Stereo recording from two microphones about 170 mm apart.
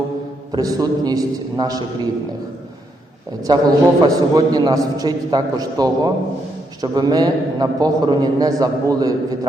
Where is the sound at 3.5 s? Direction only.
25° right (ahead or behind).